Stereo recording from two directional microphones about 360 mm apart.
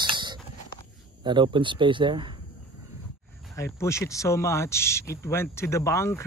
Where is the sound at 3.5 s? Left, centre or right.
Centre.